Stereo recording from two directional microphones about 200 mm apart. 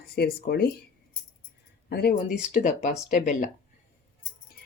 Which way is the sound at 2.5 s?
35° left (ahead or behind).